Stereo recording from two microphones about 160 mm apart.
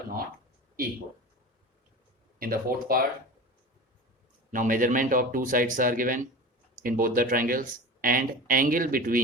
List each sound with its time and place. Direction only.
2.4 s speech: 65° right (ahead or behind)
4.5 s speech: 55° right (ahead or behind)